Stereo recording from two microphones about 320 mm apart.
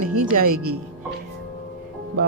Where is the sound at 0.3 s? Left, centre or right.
Right.